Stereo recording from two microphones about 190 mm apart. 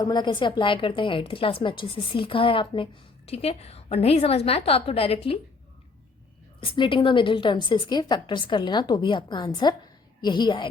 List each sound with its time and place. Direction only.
0.0 s a woman's voice: 20° left (ahead or behind)
6.6 s a woman's voice: 30° left (ahead or behind)